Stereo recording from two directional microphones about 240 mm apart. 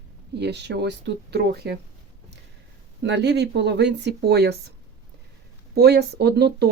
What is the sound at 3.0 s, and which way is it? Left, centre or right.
Speech, right.